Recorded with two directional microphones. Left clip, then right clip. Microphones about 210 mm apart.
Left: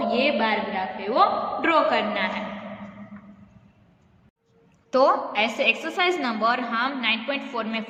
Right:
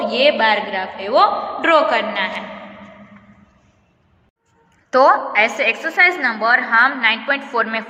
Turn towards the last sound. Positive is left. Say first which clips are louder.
# right 9 dB
turn(degrees=5)  # may be behind; listen again after turning